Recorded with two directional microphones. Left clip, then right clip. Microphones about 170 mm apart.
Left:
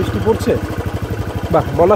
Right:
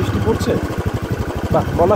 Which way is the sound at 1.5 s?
40° left (ahead or behind).